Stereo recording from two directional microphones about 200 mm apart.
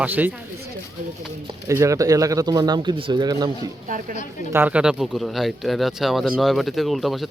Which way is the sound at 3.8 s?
40° right (ahead or behind).